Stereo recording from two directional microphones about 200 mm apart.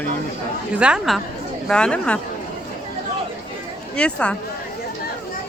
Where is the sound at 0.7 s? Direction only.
5° right (ahead or behind).